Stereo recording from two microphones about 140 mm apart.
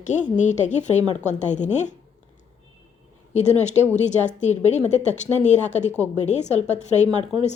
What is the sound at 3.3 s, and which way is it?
A woman's voice, 55° left (ahead or behind).